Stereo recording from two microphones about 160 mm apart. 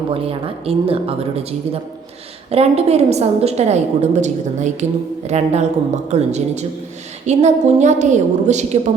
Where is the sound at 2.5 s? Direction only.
40° right (ahead or behind).